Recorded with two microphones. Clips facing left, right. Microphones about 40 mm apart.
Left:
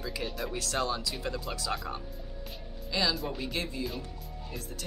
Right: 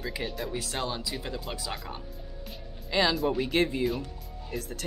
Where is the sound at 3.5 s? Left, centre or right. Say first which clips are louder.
Right 8 dB; right.